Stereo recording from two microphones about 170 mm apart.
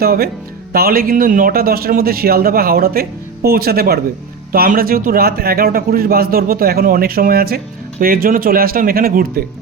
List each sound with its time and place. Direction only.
0.0 s a man's voice: 65° right (ahead or behind)